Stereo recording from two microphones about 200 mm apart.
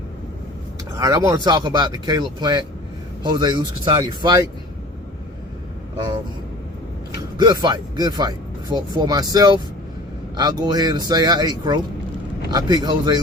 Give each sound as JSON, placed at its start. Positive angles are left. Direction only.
{"t": 0.9, "sound": "speech", "side_deg": -20}
{"t": 7.3, "sound": "speech", "side_deg": -20}